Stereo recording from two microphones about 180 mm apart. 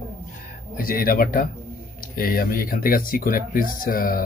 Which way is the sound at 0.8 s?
55° left (ahead or behind).